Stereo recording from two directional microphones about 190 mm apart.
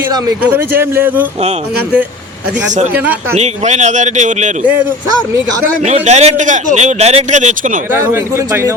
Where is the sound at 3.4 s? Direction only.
35° right (ahead or behind).